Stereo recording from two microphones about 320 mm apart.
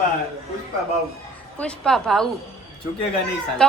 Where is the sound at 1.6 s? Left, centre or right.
Centre.